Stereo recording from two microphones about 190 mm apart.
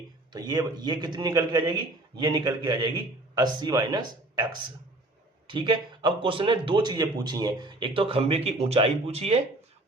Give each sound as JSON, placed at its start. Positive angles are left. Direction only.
{"t": 0.3, "sound": "speech", "side_deg": -20}